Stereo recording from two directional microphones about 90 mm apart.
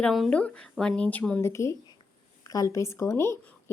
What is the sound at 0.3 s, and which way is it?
Speech, 15° left (ahead or behind).